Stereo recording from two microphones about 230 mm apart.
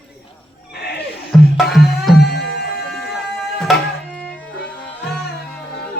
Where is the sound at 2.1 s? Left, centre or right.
Left.